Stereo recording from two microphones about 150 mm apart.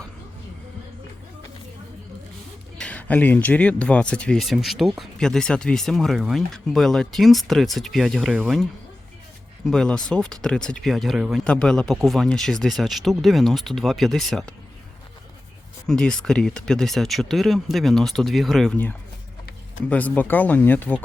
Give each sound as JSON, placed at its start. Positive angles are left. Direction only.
{"t": 2.7, "sound": "speech", "side_deg": 10}
{"t": 9.6, "sound": "speech", "side_deg": 5}
{"t": 15.9, "sound": "speech", "side_deg": 5}